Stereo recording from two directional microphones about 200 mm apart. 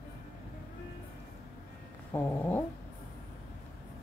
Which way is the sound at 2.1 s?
10° left (ahead or behind).